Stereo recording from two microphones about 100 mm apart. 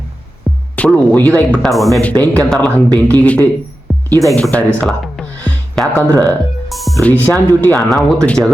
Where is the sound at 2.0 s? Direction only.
15° left (ahead or behind).